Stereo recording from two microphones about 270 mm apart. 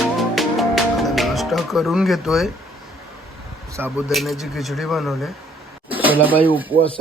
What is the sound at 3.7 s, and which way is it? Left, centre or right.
Speech, centre.